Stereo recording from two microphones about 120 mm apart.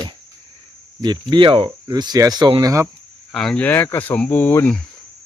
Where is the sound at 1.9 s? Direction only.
35° right (ahead or behind).